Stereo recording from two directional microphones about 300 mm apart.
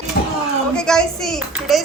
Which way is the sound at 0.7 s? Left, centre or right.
Centre.